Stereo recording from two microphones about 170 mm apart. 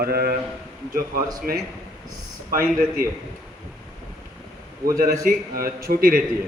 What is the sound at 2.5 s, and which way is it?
Speech, 60° right (ahead or behind).